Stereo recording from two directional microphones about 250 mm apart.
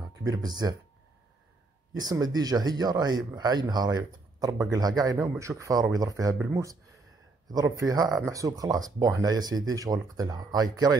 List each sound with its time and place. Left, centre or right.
0.2 s speech: centre
2.0 s speech: centre